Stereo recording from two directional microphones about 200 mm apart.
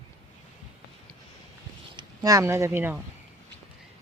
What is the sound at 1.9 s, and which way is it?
Speech, 15° right (ahead or behind).